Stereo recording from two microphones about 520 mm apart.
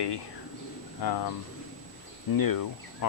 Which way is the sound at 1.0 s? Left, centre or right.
Left.